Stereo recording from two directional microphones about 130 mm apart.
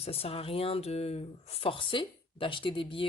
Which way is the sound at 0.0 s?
50° left (ahead or behind).